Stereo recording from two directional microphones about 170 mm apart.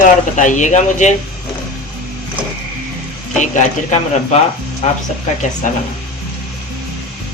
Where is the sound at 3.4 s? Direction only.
45° left (ahead or behind).